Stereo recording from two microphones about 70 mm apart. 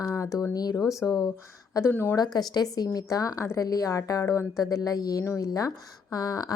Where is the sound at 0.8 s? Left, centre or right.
Centre.